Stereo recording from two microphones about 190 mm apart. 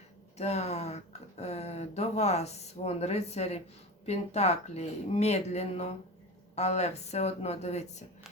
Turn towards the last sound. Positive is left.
turn(degrees=35)  # may be behind; listen again after turning